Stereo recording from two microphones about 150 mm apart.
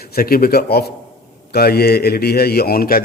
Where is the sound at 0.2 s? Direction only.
85° left.